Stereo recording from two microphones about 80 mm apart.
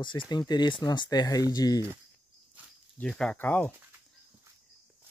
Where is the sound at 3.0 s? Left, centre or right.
Centre.